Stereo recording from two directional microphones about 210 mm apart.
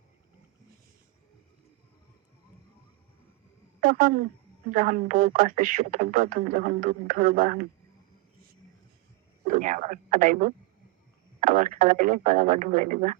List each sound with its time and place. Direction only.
3.8 s speech: 40° right (ahead or behind)
9.5 s speech: 40° right (ahead or behind)